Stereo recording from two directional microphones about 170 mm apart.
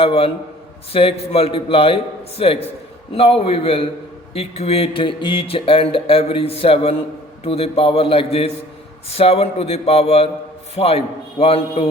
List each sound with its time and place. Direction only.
0.0 s speech: 35° left (ahead or behind)